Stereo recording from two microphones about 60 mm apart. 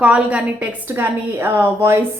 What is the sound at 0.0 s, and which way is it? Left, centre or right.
Speech, right.